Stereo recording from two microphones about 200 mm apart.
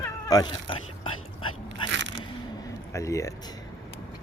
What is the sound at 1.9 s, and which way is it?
Scrape, 65° right (ahead or behind).